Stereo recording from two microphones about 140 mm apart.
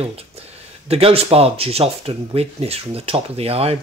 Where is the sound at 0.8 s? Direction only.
45° right (ahead or behind).